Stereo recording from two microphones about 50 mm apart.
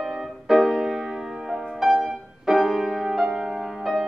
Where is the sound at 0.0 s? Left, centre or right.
Centre.